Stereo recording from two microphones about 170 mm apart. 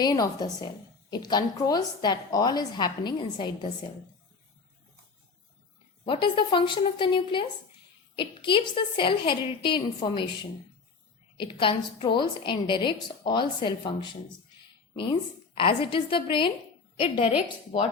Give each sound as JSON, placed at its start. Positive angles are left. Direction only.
{"t": 0.0, "sound": "a woman's voice", "side_deg": 25}
{"t": 6.1, "sound": "a woman's voice", "side_deg": 30}
{"t": 11.3, "sound": "a woman's voice", "side_deg": 30}
{"t": 15.5, "sound": "a woman's voice", "side_deg": 30}